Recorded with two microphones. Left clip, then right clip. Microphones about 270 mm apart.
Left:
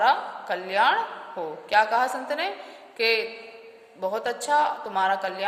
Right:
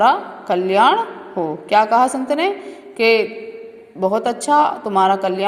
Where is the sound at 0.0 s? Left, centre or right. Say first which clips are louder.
Right 7 dB; centre.